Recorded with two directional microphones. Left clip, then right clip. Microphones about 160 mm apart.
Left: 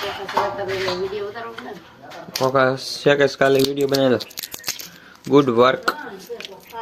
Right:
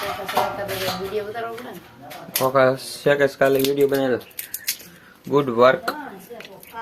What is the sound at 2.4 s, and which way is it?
Speech, 15° left (ahead or behind).